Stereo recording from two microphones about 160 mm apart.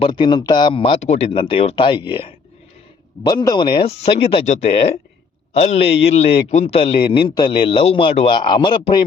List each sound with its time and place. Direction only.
0.0 s speech: 30° left (ahead or behind)
1.0 s speech: 45° left (ahead or behind)
1.3 s a man's voice: 35° left (ahead or behind)